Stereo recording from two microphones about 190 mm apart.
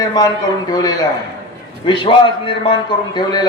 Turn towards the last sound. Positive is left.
turn(degrees=25)  # may be behind; listen again after turning